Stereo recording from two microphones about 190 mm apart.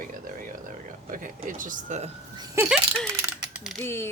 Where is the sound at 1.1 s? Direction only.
45° right (ahead or behind).